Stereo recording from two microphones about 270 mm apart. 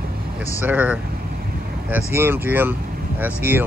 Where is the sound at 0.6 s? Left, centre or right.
Centre.